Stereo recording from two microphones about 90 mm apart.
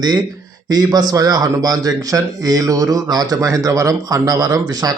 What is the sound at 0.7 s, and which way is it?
A man's voice, 45° right (ahead or behind).